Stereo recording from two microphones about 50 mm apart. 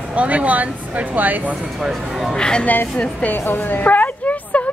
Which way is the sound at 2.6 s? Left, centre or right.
Left.